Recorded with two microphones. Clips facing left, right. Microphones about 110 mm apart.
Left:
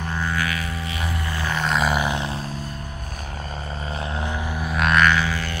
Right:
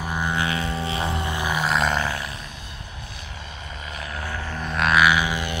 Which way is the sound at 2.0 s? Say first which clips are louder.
Left 3 dB; 20° left (ahead or behind).